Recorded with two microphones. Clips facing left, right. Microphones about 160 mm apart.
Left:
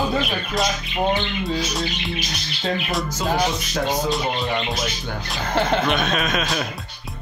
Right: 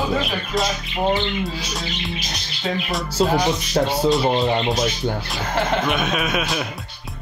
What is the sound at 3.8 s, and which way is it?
Speech, 35° right (ahead or behind).